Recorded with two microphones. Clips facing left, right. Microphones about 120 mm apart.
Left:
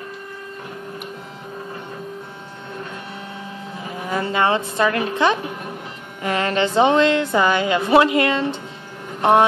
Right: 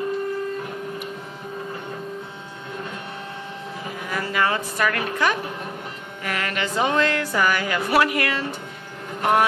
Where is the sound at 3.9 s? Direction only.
25° left (ahead or behind).